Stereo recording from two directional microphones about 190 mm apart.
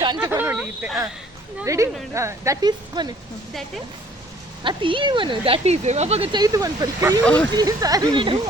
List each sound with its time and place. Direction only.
0.2 s speech: 10° right (ahead or behind)
4.6 s speech: 25° right (ahead or behind)